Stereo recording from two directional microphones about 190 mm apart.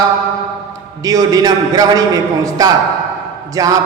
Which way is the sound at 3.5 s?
15° right (ahead or behind).